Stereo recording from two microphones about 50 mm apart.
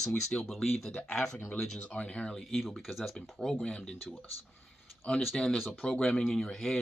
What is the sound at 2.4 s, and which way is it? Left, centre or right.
Speech, centre.